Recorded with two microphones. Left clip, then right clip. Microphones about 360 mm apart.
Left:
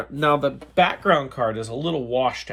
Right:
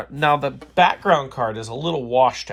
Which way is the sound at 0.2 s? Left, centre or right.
Right.